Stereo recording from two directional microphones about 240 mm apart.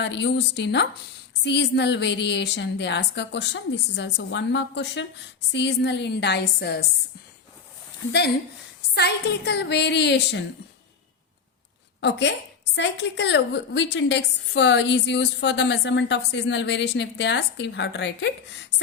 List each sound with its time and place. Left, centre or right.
0.0 s a woman's voice: left
9.0 s a woman's voice: left
11.9 s a woman's voice: left